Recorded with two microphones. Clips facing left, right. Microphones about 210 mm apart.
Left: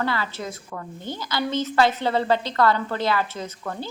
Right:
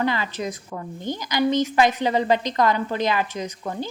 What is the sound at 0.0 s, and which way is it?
Speech, 15° right (ahead or behind).